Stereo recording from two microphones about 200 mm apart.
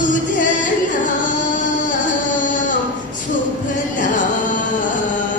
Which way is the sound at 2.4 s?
40° left (ahead or behind).